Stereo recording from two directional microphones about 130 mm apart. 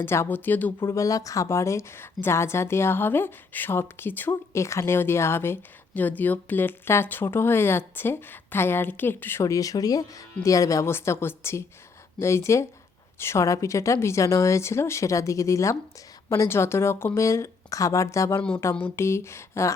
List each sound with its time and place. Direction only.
0.0 s speech: 20° left (ahead or behind)
18.3 s speech: 10° left (ahead or behind)